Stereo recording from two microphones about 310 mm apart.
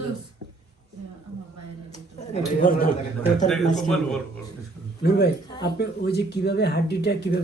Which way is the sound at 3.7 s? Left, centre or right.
Centre.